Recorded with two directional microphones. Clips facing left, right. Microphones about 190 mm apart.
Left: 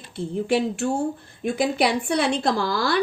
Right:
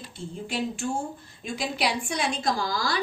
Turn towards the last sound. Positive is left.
turn(degrees=60)  # may be behind; listen again after turning